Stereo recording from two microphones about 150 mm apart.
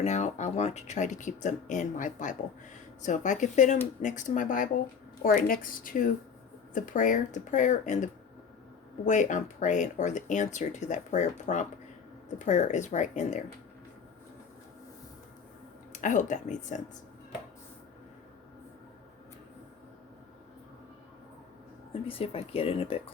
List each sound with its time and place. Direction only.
0.0 s speech: 50° left (ahead or behind)
15.9 s speech: 60° left (ahead or behind)
22.0 s speech: 40° left (ahead or behind)